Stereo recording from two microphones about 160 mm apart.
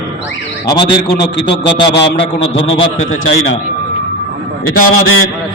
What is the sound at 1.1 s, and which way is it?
Speech, 90° left.